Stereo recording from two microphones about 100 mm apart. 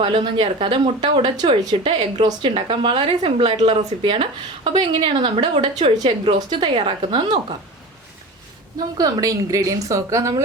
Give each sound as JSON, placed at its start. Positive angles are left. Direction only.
{"t": 0.0, "sound": "a woman's voice", "side_deg": -55}
{"t": 9.0, "sound": "a woman's voice", "side_deg": -40}